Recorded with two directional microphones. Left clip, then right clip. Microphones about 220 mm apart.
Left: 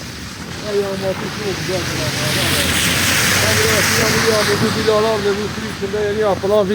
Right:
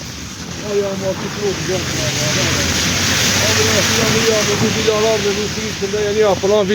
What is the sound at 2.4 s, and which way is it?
Speech, 45° left (ahead or behind).